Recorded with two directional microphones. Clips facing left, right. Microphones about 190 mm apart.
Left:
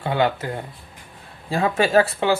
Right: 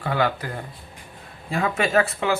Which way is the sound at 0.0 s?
25° left (ahead or behind).